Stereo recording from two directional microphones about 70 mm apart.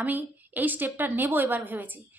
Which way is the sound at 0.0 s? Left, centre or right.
Right.